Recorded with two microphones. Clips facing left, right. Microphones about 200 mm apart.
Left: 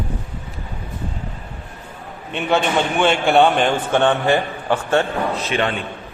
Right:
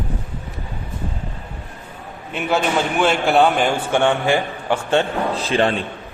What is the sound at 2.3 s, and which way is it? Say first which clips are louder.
A man's voice: left 1 dB; 5° right (ahead or behind).